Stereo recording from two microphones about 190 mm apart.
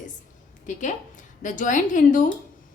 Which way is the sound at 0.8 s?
40° left (ahead or behind).